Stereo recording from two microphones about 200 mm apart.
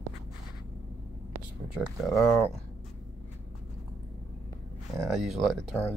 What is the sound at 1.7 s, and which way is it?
Speech, centre (ahead or behind).